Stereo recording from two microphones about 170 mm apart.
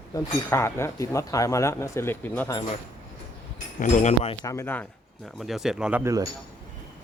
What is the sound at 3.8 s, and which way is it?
Speech, 45° left (ahead or behind).